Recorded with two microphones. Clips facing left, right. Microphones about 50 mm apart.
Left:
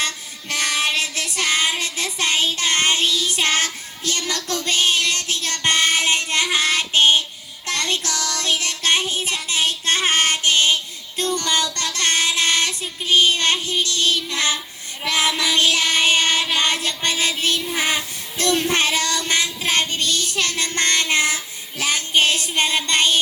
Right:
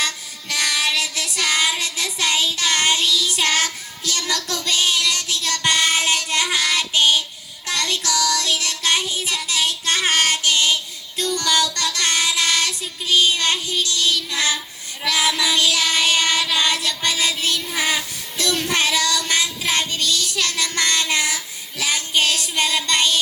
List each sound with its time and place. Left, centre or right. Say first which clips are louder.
0.0 s child singing: right 1 dB; left
17.7 s music: even; left
19.3 s child singing: left 1 dB; left